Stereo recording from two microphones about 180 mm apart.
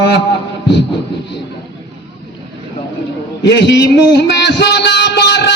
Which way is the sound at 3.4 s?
70° left (ahead or behind).